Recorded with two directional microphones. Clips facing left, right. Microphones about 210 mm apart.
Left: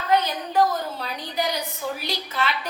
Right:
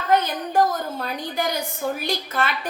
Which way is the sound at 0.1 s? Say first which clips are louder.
Right 2 dB; 50° right (ahead or behind).